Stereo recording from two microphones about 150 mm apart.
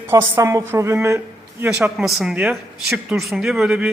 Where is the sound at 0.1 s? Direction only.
20° right (ahead or behind).